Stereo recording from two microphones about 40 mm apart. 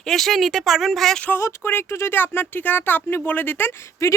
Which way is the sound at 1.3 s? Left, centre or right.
Left.